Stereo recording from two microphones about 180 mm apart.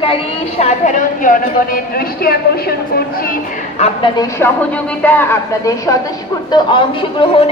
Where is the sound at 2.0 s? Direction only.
60° left (ahead or behind).